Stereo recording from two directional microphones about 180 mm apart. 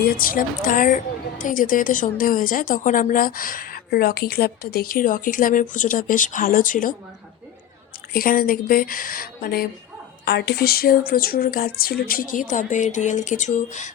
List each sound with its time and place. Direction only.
0.1 s a woman's voice: 50° left (ahead or behind)
8.1 s a woman's voice: 55° left (ahead or behind)